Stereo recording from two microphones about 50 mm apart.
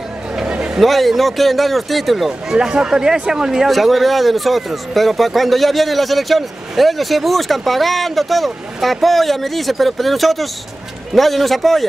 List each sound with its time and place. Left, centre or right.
0.4 s a sound: centre
0.7 s speech: centre
2.5 s speech: centre
3.7 s speech: centre